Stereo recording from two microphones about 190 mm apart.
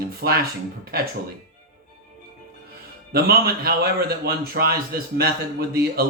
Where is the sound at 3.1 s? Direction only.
55° right (ahead or behind).